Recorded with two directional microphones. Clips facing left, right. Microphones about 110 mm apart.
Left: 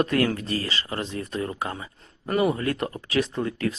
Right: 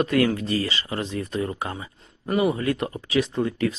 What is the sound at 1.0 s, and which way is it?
Speech, 30° left (ahead or behind).